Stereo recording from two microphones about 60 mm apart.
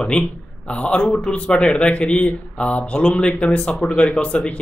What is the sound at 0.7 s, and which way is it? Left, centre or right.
Speech, centre.